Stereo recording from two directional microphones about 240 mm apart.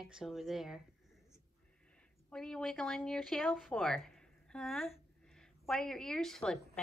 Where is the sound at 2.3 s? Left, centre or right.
Centre.